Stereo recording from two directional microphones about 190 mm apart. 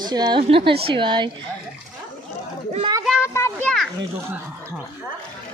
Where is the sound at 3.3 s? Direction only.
15° left (ahead or behind).